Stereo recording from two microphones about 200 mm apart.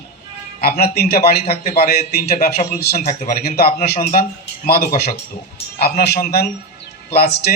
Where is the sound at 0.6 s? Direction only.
50° left (ahead or behind).